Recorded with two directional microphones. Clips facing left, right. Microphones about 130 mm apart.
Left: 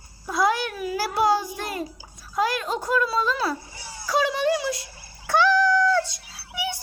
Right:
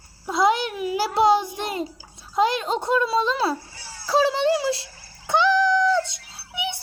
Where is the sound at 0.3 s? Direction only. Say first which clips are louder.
Right 2 dB; 20° right (ahead or behind).